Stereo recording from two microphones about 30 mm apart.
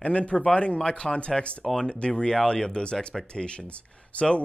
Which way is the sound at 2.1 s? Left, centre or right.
Left.